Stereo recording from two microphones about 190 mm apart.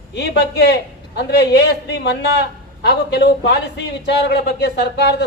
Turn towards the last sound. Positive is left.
turn(degrees=60)  # may be behind; listen again after turning